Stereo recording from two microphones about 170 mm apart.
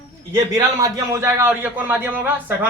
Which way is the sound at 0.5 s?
20° right (ahead or behind).